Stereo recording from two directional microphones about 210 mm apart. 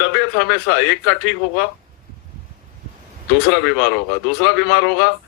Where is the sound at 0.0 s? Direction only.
60° left (ahead or behind).